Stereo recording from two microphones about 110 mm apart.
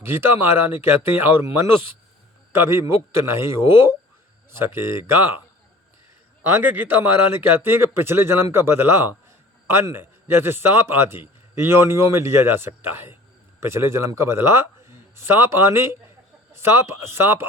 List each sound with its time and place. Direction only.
0.0 s a man's voice: 20° right (ahead or behind)
6.5 s speech: 20° right (ahead or behind)